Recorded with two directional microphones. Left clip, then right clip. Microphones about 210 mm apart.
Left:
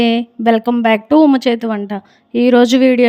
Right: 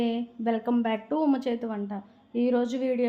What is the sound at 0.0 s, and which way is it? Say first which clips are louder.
A woman's voice: left 15 dB; 50° left (ahead or behind).